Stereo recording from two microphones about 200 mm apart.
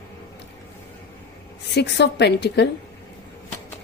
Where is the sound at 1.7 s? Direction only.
55° left (ahead or behind).